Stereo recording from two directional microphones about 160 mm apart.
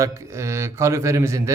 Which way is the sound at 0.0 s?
20° right (ahead or behind).